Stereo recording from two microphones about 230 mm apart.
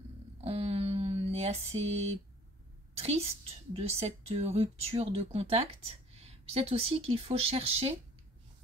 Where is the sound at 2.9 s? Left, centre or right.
Right.